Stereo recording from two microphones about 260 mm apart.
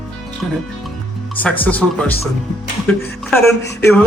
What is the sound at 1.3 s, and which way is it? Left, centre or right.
Speech, centre.